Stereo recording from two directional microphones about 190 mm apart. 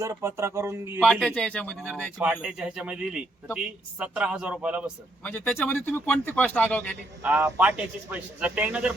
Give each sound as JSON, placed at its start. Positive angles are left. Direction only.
{"t": 0.0, "sound": "a man's voice", "side_deg": -15}
{"t": 1.0, "sound": "speech", "side_deg": 0}
{"t": 2.4, "sound": "a man's voice", "side_deg": -5}
{"t": 5.2, "sound": "speech", "side_deg": 10}
{"t": 7.2, "sound": "a man's voice", "side_deg": -10}